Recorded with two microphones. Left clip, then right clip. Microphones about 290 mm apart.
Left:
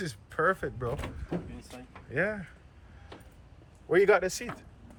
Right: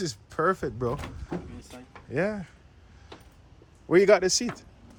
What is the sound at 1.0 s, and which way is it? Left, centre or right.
Speech, centre.